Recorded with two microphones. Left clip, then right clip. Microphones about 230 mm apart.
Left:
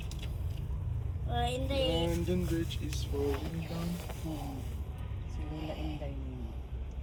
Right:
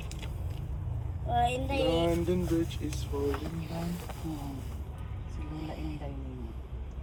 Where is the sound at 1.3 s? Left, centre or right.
Centre.